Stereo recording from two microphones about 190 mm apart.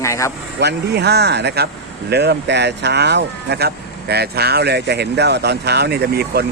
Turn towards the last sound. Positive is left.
turn(degrees=-60)  # may be behind; listen again after turning